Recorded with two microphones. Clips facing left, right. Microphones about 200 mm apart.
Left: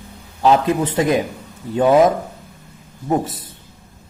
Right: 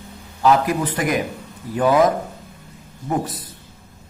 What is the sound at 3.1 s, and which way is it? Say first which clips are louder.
Speech: left 4 dB; 25° left (ahead or behind).